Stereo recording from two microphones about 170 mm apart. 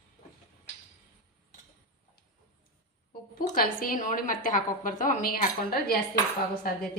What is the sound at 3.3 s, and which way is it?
A woman's voice, 55° left (ahead or behind).